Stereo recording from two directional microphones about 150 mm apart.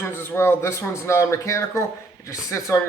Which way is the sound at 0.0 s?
15° left (ahead or behind).